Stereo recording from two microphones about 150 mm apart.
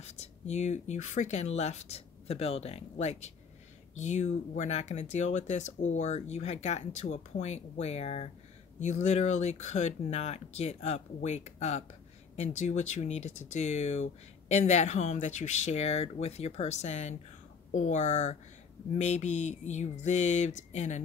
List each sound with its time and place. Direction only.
0.0 s speech: 45° left (ahead or behind)